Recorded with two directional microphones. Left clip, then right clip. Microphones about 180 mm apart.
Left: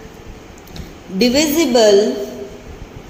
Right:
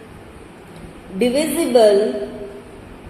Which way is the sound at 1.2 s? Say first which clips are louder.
Left 4 dB; 70° left (ahead or behind).